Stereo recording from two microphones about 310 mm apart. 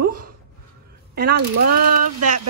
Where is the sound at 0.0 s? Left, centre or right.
Right.